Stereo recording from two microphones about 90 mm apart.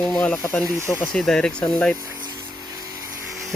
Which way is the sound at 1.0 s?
5° left (ahead or behind).